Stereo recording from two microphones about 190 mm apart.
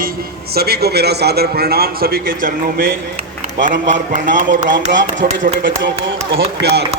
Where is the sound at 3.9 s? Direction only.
40° right (ahead or behind).